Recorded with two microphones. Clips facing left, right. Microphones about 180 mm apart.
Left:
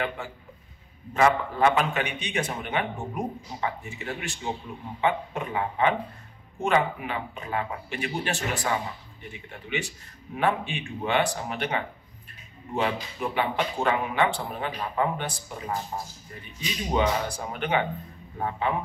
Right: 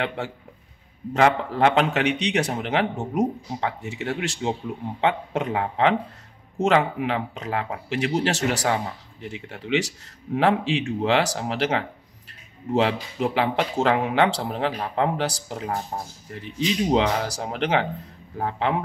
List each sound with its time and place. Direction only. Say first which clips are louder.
0.2 s speech: right 6 dB; 80° right